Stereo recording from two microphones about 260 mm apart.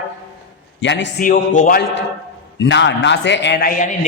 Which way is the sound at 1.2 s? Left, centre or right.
Left.